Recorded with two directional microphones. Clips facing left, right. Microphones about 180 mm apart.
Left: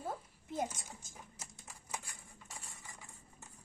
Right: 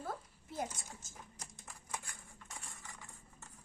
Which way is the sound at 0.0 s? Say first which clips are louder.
Left 1 dB; 15° left (ahead or behind).